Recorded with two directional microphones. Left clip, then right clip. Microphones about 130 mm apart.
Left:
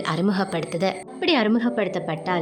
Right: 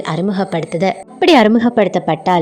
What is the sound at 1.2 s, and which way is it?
A woman's voice, 65° right (ahead or behind).